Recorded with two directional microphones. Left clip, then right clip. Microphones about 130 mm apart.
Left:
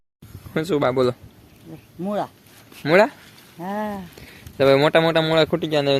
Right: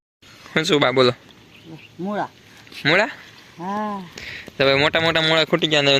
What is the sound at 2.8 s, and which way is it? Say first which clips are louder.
Speech: left 2 dB; centre (ahead or behind).